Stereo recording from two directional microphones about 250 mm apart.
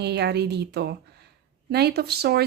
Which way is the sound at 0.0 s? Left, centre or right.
Right.